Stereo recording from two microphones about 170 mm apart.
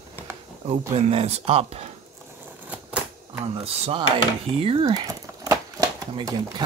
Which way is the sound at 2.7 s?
5° right (ahead or behind).